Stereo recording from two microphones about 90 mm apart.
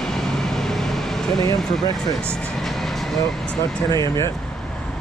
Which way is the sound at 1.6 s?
5° left (ahead or behind).